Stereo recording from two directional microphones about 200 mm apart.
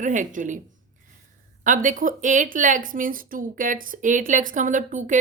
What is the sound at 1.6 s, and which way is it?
A woman's voice, 40° right (ahead or behind).